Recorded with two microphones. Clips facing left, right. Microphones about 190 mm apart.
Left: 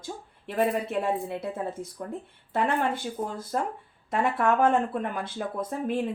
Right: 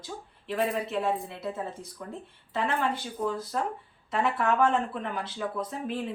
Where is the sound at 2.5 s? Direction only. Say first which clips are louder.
Left 3 dB; 50° left (ahead or behind).